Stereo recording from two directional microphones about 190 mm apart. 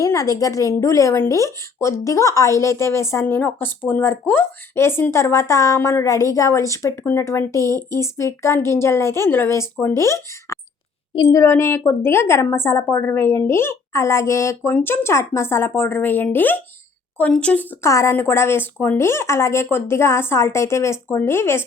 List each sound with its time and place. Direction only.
0.0 s a woman's voice: 15° left (ahead or behind)